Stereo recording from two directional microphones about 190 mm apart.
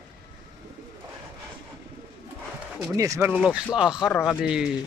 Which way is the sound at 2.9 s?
15° right (ahead or behind).